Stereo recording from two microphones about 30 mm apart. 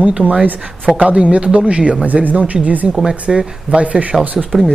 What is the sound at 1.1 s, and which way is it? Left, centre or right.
Speech, right.